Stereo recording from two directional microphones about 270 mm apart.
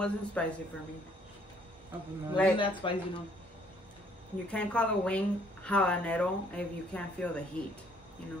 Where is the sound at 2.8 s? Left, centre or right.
Centre.